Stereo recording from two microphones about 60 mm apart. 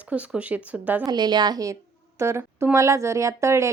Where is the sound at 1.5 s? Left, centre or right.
Right.